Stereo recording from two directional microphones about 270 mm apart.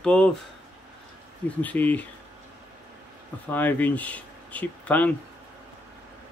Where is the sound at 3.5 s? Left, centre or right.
Centre.